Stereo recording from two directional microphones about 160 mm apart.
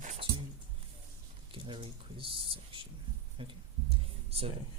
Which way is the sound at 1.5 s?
35° right (ahead or behind).